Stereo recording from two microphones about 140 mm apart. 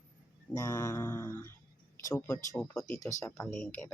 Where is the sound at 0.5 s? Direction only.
20° left (ahead or behind).